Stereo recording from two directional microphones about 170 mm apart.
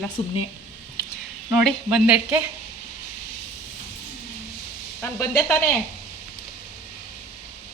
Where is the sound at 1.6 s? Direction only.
5° right (ahead or behind).